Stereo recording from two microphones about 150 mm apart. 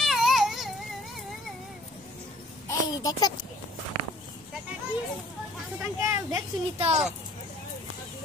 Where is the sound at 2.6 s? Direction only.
25° left (ahead or behind).